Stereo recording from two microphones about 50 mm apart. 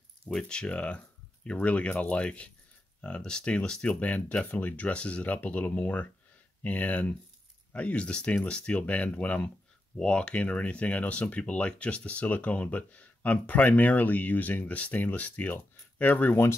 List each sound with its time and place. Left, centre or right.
0.4 s speech: centre
8.8 s speech: left